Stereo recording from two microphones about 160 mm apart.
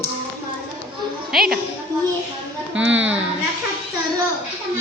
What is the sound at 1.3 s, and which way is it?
Speech, 5° right (ahead or behind).